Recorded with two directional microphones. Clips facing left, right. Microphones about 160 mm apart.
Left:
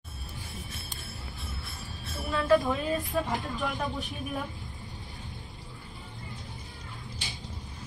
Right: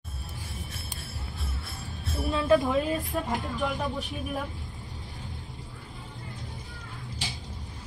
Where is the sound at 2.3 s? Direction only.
20° right (ahead or behind).